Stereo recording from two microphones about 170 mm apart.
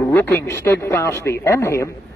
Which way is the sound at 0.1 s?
15° left (ahead or behind).